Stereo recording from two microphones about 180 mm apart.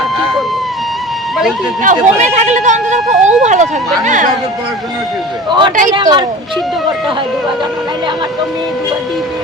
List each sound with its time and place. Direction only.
1.8 s speech: 45° right (ahead or behind)
5.5 s speech: 25° right (ahead or behind)